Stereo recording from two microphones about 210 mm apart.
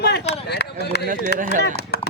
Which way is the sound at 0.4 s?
50° left (ahead or behind).